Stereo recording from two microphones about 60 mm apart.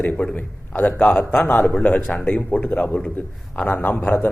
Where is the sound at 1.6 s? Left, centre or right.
Centre.